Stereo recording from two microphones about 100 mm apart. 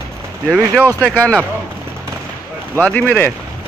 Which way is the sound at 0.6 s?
25° right (ahead or behind).